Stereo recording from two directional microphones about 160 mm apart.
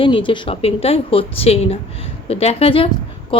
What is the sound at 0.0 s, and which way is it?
Speech, 30° left (ahead or behind).